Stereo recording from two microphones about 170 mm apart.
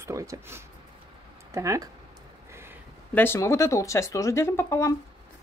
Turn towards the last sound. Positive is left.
turn(degrees=15)  # may be behind; listen again after turning